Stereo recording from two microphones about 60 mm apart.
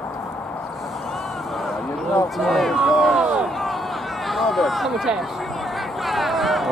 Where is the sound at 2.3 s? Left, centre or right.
Centre.